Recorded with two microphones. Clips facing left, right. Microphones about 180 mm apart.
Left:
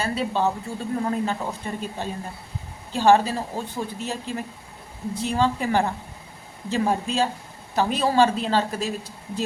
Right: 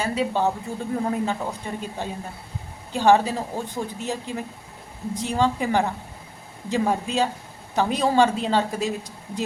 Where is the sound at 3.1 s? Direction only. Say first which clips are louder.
Even; 15° right (ahead or behind).